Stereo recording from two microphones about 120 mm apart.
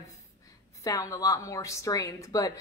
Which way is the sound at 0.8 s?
25° left (ahead or behind).